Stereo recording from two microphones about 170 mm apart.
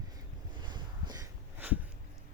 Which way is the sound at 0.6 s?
25° right (ahead or behind).